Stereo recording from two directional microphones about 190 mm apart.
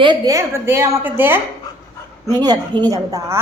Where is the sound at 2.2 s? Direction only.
20° right (ahead or behind).